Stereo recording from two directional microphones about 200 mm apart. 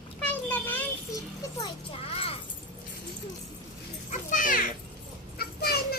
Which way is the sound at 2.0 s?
30° left (ahead or behind).